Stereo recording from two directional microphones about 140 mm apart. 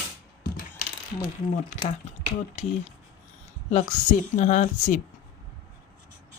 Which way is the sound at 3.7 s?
55° left (ahead or behind).